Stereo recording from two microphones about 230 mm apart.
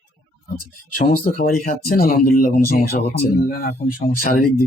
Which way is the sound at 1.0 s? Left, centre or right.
Left.